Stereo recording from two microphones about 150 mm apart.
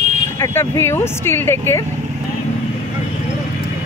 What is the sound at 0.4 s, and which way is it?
Speech, 15° left (ahead or behind).